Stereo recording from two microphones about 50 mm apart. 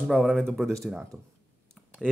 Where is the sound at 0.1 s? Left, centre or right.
Centre.